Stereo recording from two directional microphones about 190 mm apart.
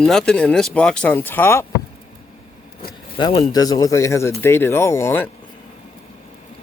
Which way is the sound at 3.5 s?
20° left (ahead or behind).